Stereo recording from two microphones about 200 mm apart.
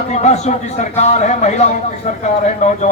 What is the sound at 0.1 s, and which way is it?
A man's voice, 35° left (ahead or behind).